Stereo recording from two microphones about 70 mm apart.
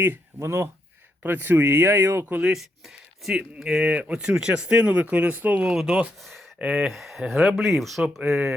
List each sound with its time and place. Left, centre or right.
0.3 s speech: right
1.2 s speech: right
2.4 s speech: centre
3.3 s speech: centre
5.7 s speech: centre